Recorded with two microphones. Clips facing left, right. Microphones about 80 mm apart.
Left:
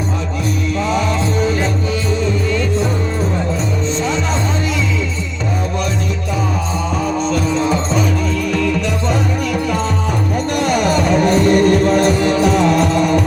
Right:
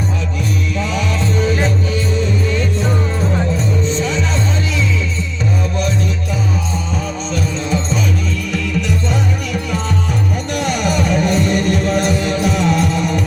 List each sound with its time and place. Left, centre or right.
0.8 s music: left
10.7 s music: left